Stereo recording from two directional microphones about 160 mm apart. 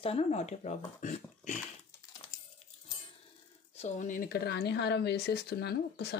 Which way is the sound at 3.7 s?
45° left (ahead or behind).